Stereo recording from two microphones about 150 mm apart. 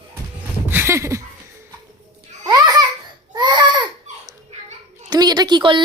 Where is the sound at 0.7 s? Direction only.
15° right (ahead or behind).